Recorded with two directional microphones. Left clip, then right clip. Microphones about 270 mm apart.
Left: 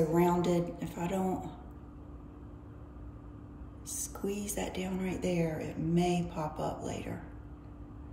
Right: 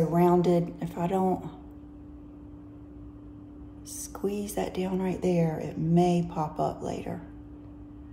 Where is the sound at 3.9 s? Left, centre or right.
Centre.